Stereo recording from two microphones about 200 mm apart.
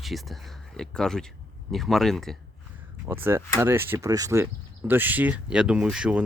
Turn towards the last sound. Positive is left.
turn(degrees=-5)  # may be behind; listen again after turning